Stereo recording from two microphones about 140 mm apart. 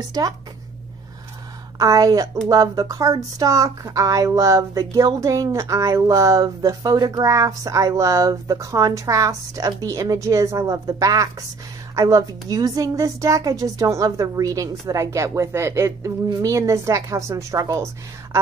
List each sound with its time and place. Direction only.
1.8 s speech: 25° right (ahead or behind)